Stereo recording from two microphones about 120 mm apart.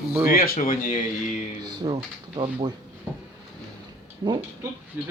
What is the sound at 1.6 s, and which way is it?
Speech, 40° right (ahead or behind).